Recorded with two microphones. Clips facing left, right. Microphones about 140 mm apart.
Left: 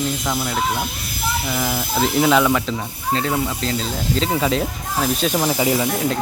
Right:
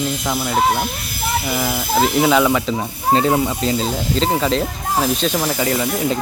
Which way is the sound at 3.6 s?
10° right (ahead or behind).